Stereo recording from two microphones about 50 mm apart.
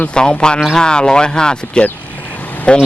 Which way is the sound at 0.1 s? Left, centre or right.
Centre.